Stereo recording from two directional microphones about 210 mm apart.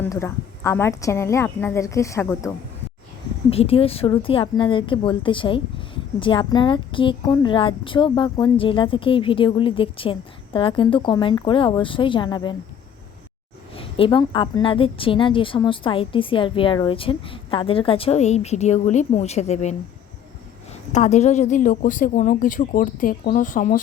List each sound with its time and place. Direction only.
0.0 s a woman's voice: 10° left (ahead or behind)
3.5 s a woman's voice: 25° left (ahead or behind)
13.7 s a woman's voice: 25° left (ahead or behind)
20.9 s speech: 35° left (ahead or behind)